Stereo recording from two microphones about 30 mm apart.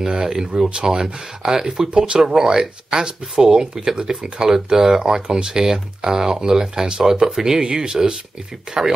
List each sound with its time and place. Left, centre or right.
0.1 s speech: right